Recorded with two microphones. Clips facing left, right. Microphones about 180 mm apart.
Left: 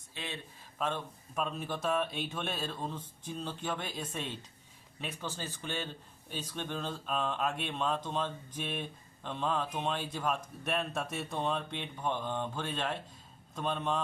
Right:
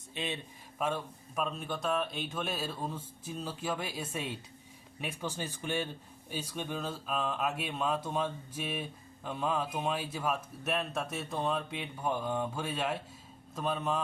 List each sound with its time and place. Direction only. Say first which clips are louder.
0.1 s a man's voice: right 5 dB; 20° right (ahead or behind)
0.8 s speech: right 2 dB; 5° right (ahead or behind)